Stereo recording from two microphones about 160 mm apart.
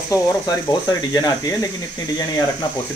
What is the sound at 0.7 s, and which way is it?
Speech, 25° left (ahead or behind).